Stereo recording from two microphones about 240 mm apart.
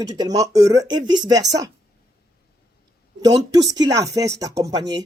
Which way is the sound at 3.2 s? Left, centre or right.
Centre.